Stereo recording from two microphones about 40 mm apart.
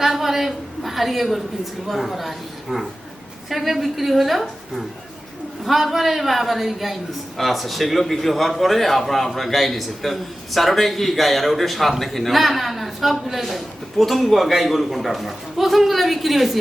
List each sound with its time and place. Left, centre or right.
0.0 s a woman's voice: centre